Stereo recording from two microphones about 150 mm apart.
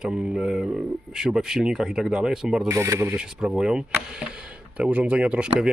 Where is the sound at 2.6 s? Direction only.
15° right (ahead or behind).